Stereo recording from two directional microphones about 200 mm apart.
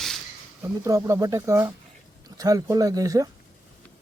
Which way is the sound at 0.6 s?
15° right (ahead or behind).